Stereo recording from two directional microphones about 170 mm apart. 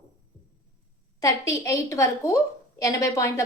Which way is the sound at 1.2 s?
20° left (ahead or behind).